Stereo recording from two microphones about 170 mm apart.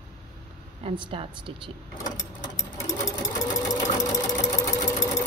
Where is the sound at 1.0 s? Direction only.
30° right (ahead or behind).